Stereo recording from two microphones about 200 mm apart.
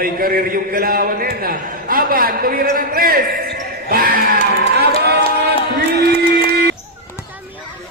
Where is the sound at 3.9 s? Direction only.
45° right (ahead or behind).